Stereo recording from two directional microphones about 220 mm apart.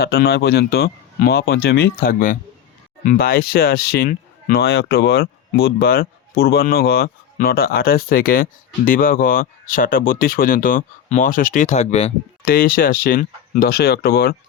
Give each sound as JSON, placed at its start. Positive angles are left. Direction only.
{"t": 0.0, "sound": "speech", "side_deg": 45}
{"t": 12.5, "sound": "speech", "side_deg": 40}